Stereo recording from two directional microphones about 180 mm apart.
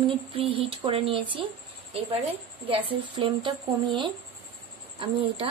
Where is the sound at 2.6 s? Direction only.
30° right (ahead or behind).